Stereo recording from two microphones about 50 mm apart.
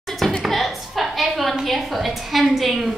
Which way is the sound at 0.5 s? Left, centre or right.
Centre.